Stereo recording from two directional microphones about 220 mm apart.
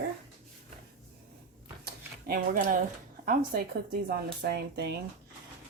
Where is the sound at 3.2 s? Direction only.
45° right (ahead or behind).